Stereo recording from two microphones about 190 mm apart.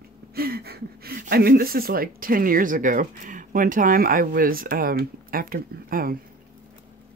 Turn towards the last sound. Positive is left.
turn(degrees=-50)  # may be behind; listen again after turning